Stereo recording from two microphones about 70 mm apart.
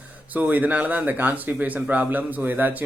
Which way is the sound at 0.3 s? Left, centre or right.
Right.